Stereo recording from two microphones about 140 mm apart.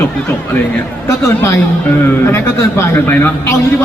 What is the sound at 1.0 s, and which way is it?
A woman's voice, 20° left (ahead or behind).